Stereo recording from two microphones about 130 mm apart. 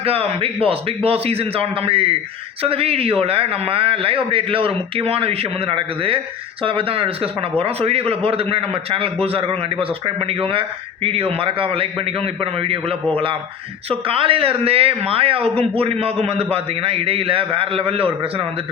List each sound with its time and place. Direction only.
0.0 s a man's voice: 50° right (ahead or behind)